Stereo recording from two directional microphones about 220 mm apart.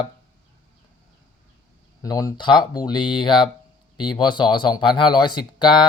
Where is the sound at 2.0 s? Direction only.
15° left (ahead or behind).